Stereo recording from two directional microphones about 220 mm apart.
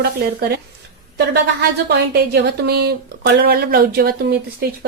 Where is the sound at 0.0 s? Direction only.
45° right (ahead or behind).